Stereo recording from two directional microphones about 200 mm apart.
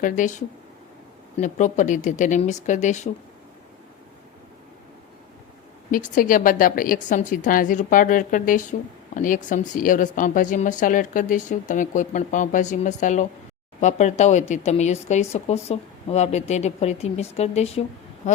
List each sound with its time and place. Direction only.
0.0 s speech: 40° left (ahead or behind)
6.1 s a woman's voice: 45° left (ahead or behind)